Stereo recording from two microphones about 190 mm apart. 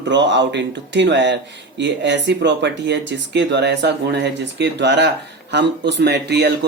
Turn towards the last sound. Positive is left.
turn(degrees=-60)  # may be behind; listen again after turning